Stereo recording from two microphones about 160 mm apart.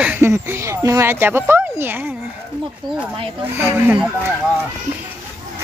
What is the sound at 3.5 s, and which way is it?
Speech, 15° right (ahead or behind).